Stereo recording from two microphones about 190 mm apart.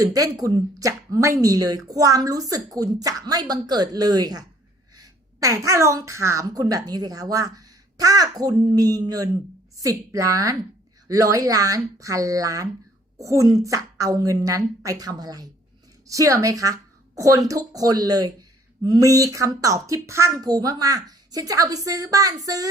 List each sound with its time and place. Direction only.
0.0 s a woman's voice: 20° right (ahead or behind)